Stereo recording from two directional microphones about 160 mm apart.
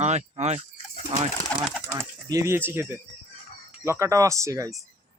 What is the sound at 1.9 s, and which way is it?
Speech, 20° right (ahead or behind).